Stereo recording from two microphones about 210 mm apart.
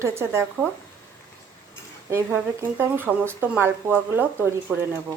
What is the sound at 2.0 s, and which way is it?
Speech, 15° right (ahead or behind).